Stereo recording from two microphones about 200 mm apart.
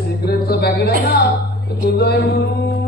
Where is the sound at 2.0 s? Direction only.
50° left (ahead or behind).